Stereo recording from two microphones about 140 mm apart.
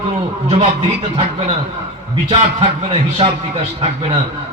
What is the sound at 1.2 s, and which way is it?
A man's voice, 45° right (ahead or behind).